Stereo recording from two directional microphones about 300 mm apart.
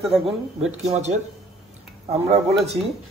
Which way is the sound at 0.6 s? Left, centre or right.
Right.